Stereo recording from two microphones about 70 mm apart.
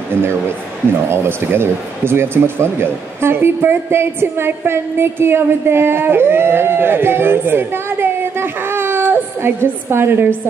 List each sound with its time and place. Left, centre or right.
0.2 s speech: right